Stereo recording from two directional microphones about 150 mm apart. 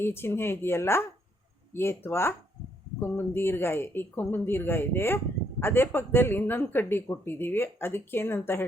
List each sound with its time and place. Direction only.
0.0 s speech: 15° left (ahead or behind)